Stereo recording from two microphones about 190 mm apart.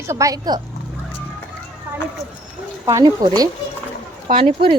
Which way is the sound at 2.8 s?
20° right (ahead or behind).